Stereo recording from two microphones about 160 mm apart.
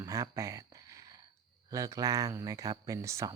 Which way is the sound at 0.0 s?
20° right (ahead or behind).